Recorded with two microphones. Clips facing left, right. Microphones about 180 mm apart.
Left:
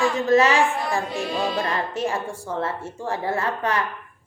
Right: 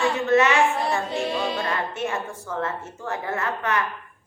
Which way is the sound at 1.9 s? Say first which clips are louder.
Left 2 dB; 30° left (ahead or behind).